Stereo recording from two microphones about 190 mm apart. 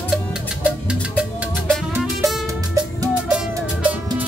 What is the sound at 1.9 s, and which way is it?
Music, centre (ahead or behind).